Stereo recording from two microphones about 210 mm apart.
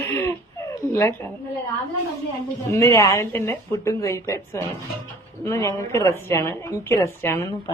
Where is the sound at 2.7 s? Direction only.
15° left (ahead or behind).